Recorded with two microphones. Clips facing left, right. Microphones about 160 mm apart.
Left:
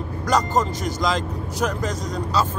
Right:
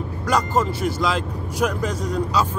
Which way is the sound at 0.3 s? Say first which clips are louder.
Even; 5° right (ahead or behind).